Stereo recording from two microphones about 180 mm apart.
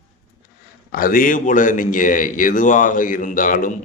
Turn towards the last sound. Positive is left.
turn(degrees=45)  # may be behind; listen again after turning